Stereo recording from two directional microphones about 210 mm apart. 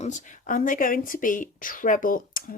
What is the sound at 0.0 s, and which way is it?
Speech, 35° left (ahead or behind).